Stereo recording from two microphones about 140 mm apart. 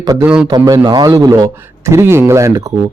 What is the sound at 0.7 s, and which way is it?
A man's voice, 30° right (ahead or behind).